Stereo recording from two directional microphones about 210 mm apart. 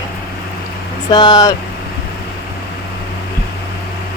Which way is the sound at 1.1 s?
20° left (ahead or behind).